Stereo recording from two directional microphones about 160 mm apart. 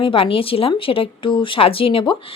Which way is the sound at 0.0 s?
35° left (ahead or behind).